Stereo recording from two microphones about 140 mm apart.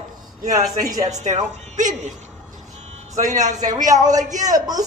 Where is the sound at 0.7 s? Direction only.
25° right (ahead or behind).